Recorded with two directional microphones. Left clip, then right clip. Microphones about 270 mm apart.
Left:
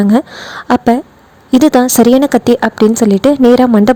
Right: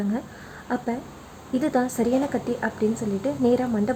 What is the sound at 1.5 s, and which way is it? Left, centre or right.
Speech, left.